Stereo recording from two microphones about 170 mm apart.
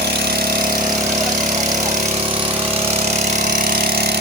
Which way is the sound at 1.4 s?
45° right (ahead or behind).